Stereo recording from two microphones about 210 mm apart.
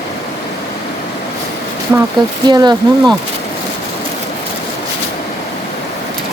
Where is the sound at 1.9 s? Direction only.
5° right (ahead or behind).